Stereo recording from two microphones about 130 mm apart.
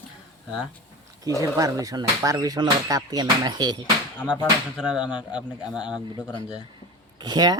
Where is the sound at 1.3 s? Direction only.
25° right (ahead or behind).